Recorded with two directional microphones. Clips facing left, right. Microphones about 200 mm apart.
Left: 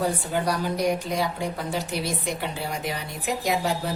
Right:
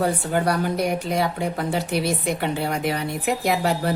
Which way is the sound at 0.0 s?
60° right (ahead or behind).